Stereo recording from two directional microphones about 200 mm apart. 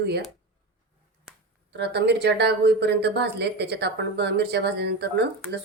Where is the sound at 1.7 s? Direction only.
55° right (ahead or behind).